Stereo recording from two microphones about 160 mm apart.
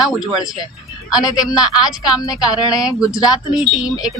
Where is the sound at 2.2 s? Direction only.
25° left (ahead or behind).